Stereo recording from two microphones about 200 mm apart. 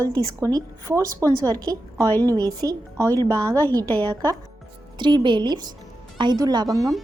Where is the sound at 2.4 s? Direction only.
20° right (ahead or behind).